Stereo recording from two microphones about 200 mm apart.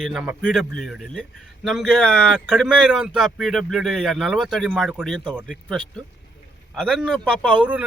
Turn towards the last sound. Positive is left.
turn(degrees=-5)  # may be behind; listen again after turning